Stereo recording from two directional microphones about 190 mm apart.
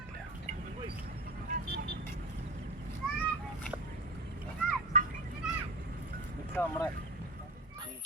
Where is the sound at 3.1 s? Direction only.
5° left (ahead or behind).